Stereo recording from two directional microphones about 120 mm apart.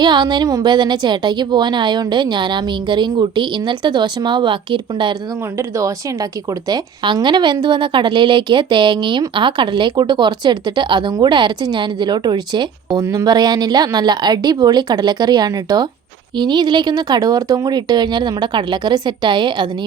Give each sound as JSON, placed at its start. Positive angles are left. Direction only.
{"t": 0.0, "sound": "a woman's voice", "side_deg": -35}
{"t": 5.5, "sound": "speech", "side_deg": -25}
{"t": 6.7, "sound": "a woman's voice", "side_deg": -35}